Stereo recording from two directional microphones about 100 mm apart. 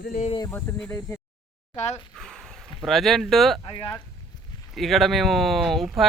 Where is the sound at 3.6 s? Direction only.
55° left (ahead or behind).